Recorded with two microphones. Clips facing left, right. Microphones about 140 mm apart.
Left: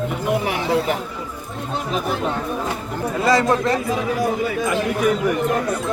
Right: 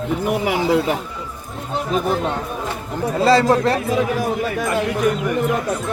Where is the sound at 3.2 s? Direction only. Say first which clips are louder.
Right 3 dB; 30° right (ahead or behind).